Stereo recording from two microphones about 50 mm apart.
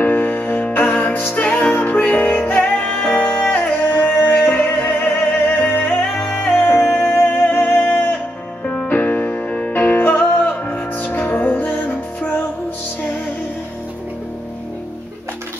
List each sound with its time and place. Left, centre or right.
0.0 s music: left
1.3 s music: left
2.1 s music: left
2.6 s music: left
3.3 s music: left
5.9 s music: centre
6.6 s music: left
7.1 s music: left
8.6 s music: left